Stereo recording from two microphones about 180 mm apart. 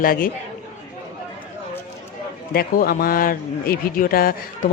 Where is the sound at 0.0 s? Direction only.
50° left (ahead or behind).